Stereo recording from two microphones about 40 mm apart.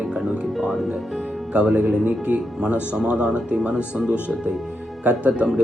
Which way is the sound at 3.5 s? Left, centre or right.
Centre.